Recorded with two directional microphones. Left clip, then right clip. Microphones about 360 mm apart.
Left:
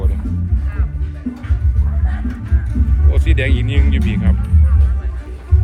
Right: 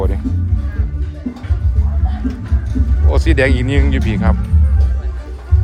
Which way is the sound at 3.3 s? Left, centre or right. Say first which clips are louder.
Right 7 dB; right.